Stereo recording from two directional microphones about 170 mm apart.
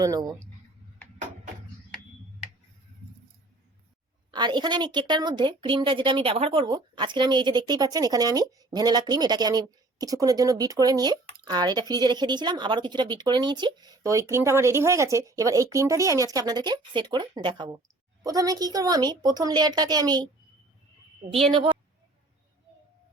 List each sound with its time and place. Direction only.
0.0 s speech: 20° right (ahead or behind)
4.3 s speech: 25° right (ahead or behind)